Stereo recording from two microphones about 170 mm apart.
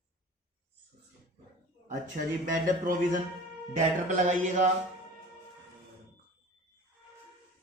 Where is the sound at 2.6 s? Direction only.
50° right (ahead or behind).